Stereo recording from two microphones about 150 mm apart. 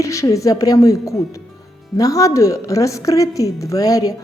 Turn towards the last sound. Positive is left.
turn(degrees=25)  # may be behind; listen again after turning